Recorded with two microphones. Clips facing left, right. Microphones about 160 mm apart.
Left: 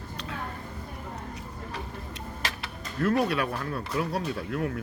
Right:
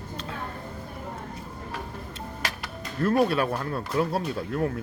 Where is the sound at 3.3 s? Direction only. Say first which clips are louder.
Right 3 dB; 30° right (ahead or behind).